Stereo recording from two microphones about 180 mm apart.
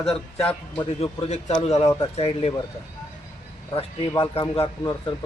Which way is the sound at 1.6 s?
35° left (ahead or behind).